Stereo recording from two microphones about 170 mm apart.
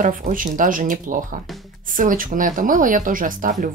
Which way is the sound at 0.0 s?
50° right (ahead or behind).